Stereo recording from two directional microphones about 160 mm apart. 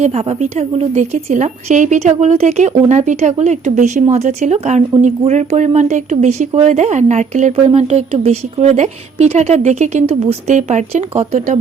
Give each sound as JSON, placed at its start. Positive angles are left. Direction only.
{"t": 0.0, "sound": "speech", "side_deg": -40}